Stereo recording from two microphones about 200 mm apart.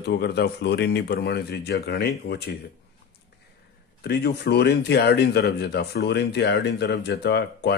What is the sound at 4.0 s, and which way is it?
Speech, 55° left (ahead or behind).